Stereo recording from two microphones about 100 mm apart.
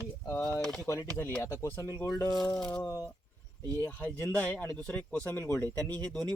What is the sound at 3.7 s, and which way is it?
Speech, 20° left (ahead or behind).